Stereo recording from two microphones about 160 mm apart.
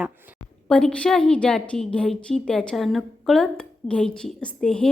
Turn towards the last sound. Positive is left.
turn(degrees=5)  # may be behind; listen again after turning